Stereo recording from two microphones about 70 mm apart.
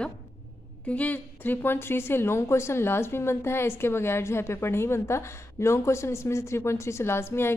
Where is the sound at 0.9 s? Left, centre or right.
Left.